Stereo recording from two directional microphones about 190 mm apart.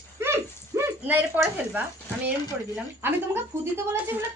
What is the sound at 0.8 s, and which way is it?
A woman's voice, 10° right (ahead or behind).